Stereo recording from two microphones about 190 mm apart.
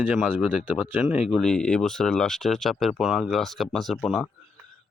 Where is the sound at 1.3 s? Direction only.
5° left (ahead or behind).